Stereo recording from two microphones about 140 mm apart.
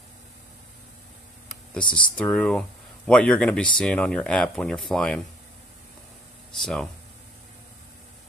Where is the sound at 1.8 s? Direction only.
35° left (ahead or behind).